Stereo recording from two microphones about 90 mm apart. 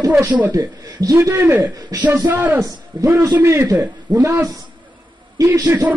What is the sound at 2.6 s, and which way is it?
A man's voice, 35° right (ahead or behind).